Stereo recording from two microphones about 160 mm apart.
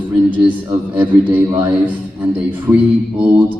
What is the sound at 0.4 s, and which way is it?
A man's voice, 10° right (ahead or behind).